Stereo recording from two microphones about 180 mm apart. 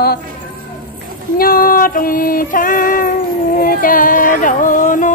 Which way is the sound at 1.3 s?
55° left (ahead or behind).